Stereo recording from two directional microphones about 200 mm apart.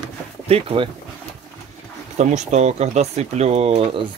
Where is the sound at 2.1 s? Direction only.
35° right (ahead or behind).